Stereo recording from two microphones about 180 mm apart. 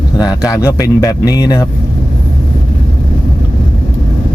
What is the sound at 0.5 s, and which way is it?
Speech, 15° left (ahead or behind).